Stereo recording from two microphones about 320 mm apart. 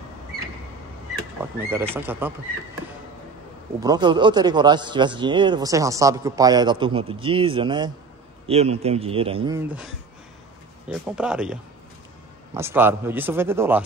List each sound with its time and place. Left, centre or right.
1.4 s a man's voice: centre
3.8 s a man's voice: centre
10.9 s speech: centre
12.5 s a man's voice: centre